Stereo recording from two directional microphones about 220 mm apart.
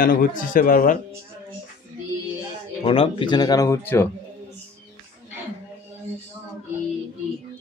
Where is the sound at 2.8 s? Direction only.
25° left (ahead or behind).